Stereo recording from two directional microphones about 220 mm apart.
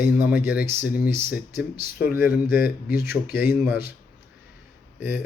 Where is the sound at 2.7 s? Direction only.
40° left (ahead or behind).